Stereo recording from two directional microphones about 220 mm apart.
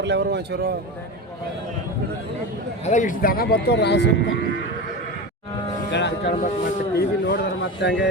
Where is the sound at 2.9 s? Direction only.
35° left (ahead or behind).